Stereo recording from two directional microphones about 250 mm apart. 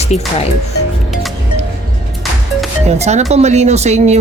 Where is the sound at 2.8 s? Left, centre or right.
Right.